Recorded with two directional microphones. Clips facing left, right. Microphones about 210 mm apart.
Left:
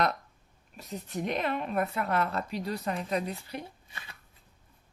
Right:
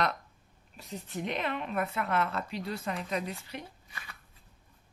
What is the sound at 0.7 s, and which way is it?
Speech, 45° left (ahead or behind).